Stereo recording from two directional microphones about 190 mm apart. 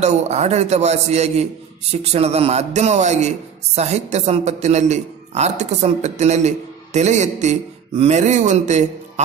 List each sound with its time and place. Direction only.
0.0 s a man's voice: 35° right (ahead or behind)